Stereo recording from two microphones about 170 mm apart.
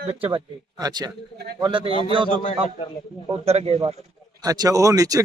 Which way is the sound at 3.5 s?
35° right (ahead or behind).